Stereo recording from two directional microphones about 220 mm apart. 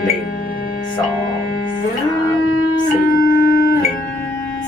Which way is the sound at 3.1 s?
40° left (ahead or behind).